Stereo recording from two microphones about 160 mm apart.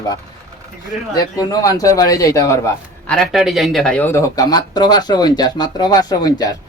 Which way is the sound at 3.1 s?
Centre (ahead or behind).